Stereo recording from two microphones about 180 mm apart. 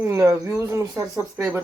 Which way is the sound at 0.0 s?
15° right (ahead or behind).